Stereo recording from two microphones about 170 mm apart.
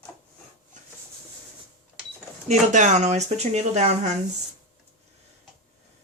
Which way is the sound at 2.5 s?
45° right (ahead or behind).